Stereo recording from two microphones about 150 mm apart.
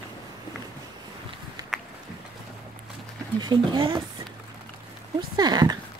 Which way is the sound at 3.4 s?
30° right (ahead or behind).